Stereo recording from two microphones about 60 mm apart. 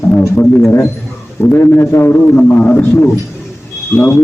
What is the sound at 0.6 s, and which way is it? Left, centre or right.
A man's voice, left.